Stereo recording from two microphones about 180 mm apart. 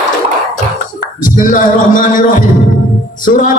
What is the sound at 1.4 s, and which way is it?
Speech, 50° left (ahead or behind).